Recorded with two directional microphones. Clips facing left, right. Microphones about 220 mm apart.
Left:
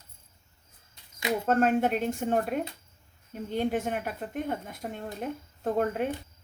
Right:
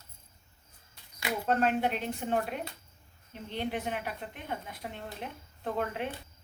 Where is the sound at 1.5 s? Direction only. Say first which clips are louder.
Left 4 dB; 45° left (ahead or behind).